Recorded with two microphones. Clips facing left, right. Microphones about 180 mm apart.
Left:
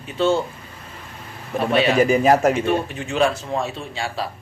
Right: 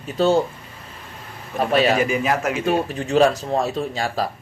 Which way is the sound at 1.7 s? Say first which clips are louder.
Right 1 dB; 40° right (ahead or behind).